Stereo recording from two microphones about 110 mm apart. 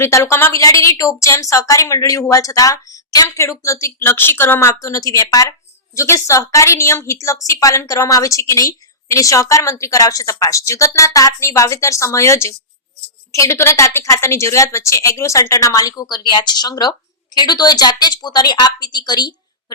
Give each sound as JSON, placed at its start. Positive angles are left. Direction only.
{"t": 0.0, "sound": "a woman's voice", "side_deg": 25}
{"t": 4.7, "sound": "a woman's voice", "side_deg": 30}